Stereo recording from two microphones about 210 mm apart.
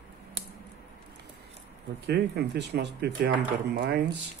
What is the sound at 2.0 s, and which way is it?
Speech, 50° right (ahead or behind).